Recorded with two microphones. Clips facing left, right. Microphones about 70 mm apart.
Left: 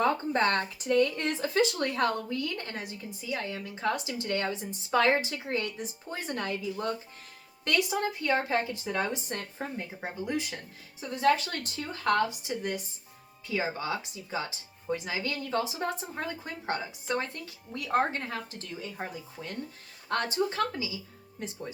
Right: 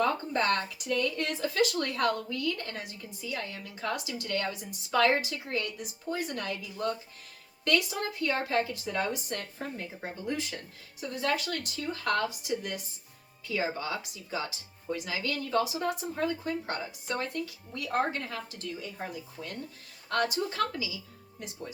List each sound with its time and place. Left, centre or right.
0.0 s speech: left
11.0 s speech: left
20.1 s speech: left